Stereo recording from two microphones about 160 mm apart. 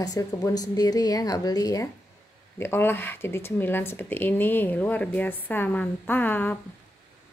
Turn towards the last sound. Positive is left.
turn(degrees=10)  # may be behind; listen again after turning